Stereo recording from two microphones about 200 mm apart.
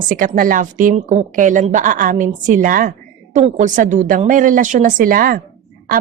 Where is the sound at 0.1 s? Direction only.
40° right (ahead or behind).